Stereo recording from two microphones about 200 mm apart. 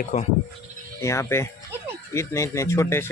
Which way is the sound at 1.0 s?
15° left (ahead or behind).